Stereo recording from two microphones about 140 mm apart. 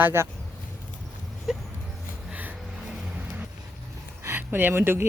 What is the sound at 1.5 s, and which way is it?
Speech, 5° right (ahead or behind).